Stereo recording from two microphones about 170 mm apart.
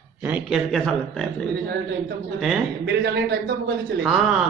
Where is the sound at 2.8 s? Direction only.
80° right.